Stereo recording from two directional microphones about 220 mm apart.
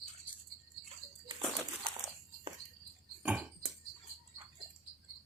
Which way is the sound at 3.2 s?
5° right (ahead or behind).